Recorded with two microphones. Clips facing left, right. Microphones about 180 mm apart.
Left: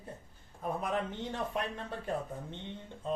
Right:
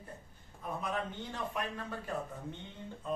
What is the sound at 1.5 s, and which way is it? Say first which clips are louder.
Speech: left 2 dB; 30° left (ahead or behind).